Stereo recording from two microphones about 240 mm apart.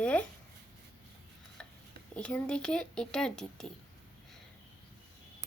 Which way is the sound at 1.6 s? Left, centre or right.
Centre.